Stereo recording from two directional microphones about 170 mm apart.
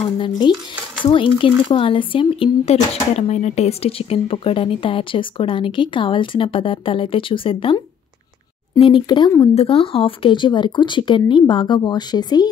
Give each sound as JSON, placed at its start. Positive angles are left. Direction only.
{"t": 0.5, "sound": "speech", "side_deg": 25}